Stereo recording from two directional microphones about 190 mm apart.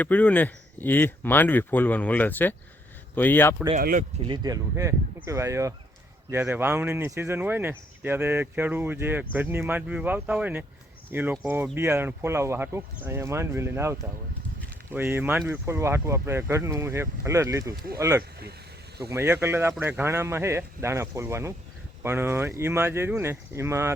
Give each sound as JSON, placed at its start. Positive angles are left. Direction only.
{"t": 0.0, "sound": "speech", "side_deg": 10}
{"t": 3.8, "sound": "speech", "side_deg": -50}
{"t": 4.2, "sound": "speech", "side_deg": -20}